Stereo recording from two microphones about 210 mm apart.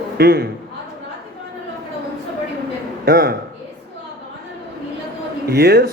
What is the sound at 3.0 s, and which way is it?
Speech, 50° right (ahead or behind).